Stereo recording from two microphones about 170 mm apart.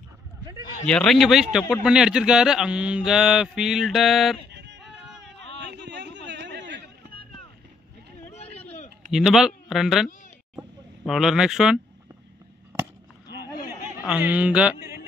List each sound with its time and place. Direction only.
0.8 s speech: 5° left (ahead or behind)
4.5 s yodeling: 85° right
5.6 s a sound: 90° right
9.1 s speech: centre (ahead or behind)
11.1 s speech: centre (ahead or behind)
14.0 s a man's voice: 10° right (ahead or behind)